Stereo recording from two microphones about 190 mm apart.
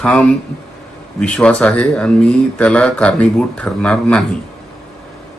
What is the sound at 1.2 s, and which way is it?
Speech, 5° left (ahead or behind).